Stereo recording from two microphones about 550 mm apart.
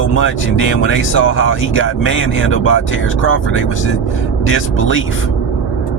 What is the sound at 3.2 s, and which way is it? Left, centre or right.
Speech, left.